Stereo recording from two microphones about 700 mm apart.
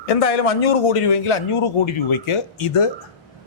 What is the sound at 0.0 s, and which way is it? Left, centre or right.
A man's voice, left.